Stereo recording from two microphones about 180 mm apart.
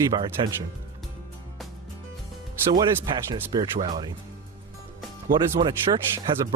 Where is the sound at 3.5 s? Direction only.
20° right (ahead or behind).